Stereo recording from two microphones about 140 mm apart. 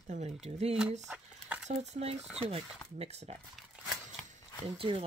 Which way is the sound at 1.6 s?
50° right (ahead or behind).